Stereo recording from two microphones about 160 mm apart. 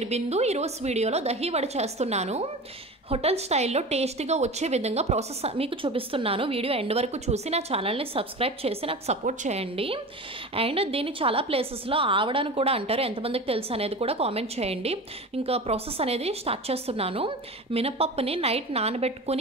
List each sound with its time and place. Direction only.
0.0 s a woman's voice: 45° right (ahead or behind)